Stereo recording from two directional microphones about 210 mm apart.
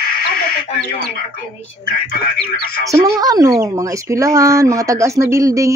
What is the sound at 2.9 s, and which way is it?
Speech, 20° right (ahead or behind).